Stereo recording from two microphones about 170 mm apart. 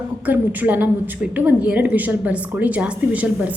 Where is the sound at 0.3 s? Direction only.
10° right (ahead or behind).